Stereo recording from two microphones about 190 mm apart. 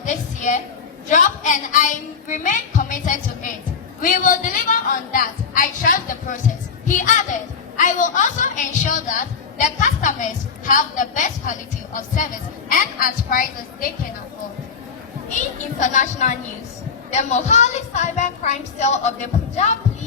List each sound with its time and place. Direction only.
0.0 s a woman's voice: 40° left (ahead or behind)
15.8 s a woman's voice: 40° left (ahead or behind)